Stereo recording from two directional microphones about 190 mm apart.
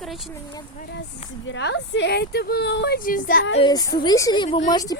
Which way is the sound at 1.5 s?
70° left (ahead or behind).